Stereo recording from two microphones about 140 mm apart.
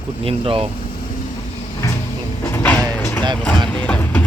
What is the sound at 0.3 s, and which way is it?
Speech, 40° right (ahead or behind).